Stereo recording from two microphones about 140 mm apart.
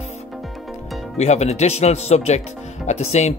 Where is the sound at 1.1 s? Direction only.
55° left (ahead or behind).